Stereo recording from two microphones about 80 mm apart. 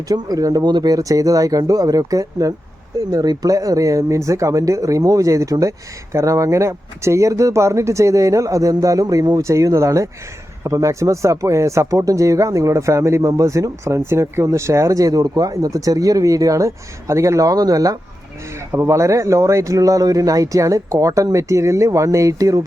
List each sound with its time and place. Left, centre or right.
0.1 s speech: right
18.7 s speech: right